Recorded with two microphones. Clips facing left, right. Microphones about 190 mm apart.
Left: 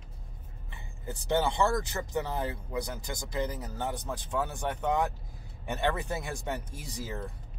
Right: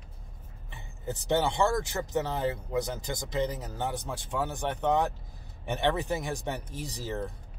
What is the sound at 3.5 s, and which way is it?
Speech, 15° right (ahead or behind).